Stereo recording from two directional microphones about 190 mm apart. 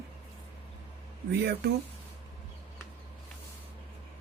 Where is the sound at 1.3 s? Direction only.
60° right (ahead or behind).